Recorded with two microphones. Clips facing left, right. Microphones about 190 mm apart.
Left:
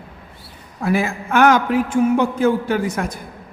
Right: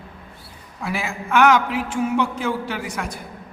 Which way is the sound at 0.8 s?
50° left (ahead or behind).